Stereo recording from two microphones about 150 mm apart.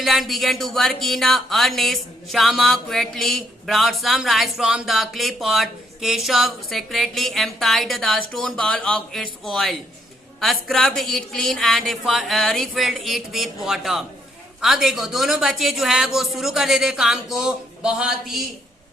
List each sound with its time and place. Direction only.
0.0 s speech: centre (ahead or behind)